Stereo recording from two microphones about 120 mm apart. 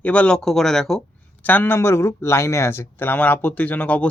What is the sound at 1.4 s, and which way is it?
Speech, 15° left (ahead or behind).